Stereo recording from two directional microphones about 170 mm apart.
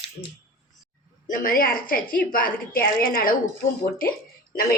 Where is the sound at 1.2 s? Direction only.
55° left (ahead or behind).